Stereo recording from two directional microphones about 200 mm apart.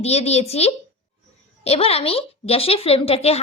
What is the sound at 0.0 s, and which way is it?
A woman's voice, 30° left (ahead or behind).